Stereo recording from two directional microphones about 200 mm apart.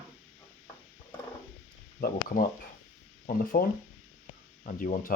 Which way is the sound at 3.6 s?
50° left (ahead or behind).